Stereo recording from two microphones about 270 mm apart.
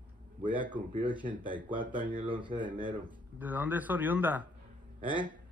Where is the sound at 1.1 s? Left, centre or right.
Centre.